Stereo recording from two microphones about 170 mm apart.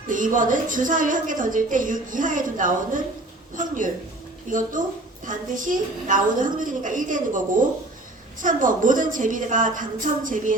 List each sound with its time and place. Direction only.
0.1 s a woman's voice: 50° right (ahead or behind)